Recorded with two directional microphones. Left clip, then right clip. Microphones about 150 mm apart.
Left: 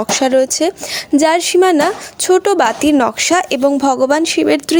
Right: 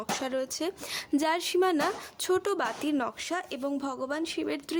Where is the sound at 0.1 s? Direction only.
35° left (ahead or behind).